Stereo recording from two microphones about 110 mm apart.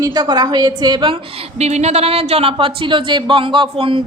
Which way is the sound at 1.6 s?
85° right.